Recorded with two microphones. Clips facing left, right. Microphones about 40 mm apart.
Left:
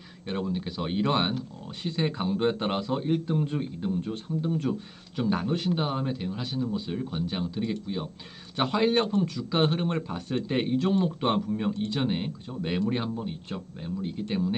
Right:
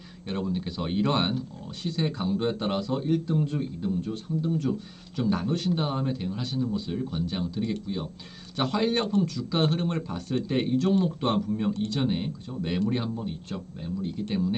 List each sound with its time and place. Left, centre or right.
0.3 s speech: centre
1.8 s a man's voice: left
11.7 s a man's voice: left